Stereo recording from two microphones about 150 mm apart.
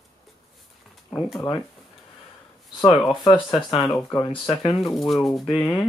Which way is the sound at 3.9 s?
20° left (ahead or behind).